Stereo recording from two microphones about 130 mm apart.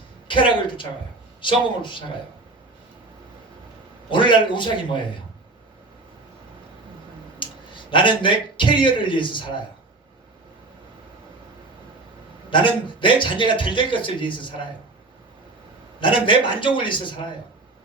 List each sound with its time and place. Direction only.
0.3 s a woman's voice: 40° left (ahead or behind)
4.1 s a man's voice: 40° left (ahead or behind)
7.3 s a man's voice: 40° left (ahead or behind)
12.5 s a man's voice: 40° left (ahead or behind)
16.0 s a man's voice: 40° left (ahead or behind)